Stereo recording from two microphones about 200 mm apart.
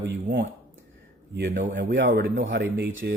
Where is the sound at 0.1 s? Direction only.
55° right (ahead or behind).